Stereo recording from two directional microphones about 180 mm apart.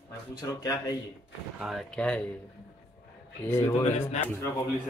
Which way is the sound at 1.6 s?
Centre (ahead or behind).